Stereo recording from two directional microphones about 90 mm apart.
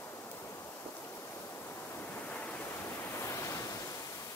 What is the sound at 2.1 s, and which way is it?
Waves, 15° left (ahead or behind).